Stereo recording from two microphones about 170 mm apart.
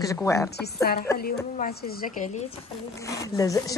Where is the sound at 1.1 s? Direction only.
60° left (ahead or behind).